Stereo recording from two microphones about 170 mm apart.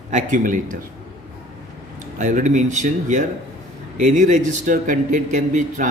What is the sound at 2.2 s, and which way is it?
Speech, 45° right (ahead or behind).